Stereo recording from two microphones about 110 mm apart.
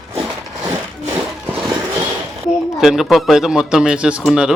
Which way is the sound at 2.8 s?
Centre (ahead or behind).